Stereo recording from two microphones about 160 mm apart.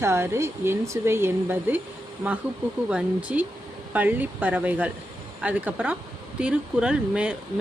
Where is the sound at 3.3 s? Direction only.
5° right (ahead or behind).